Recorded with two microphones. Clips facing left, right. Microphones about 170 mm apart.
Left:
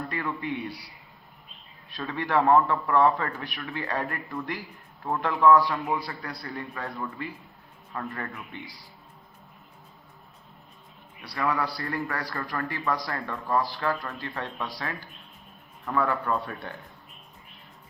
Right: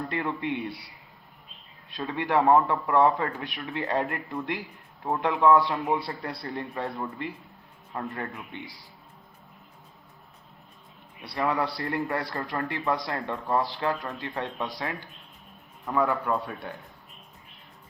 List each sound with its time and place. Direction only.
0.1 s a man's voice: 25° right (ahead or behind)
1.9 s a man's voice: 20° right (ahead or behind)
11.2 s a man's voice: 25° right (ahead or behind); by 16.8 s 10° right (ahead or behind)